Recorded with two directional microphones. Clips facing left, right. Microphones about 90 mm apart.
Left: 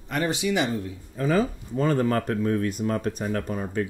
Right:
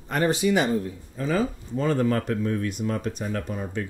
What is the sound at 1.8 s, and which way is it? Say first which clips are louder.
Speech: left 1 dB; 40° left (ahead or behind).